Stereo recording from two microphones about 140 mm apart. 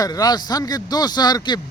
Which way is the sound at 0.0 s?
25° left (ahead or behind).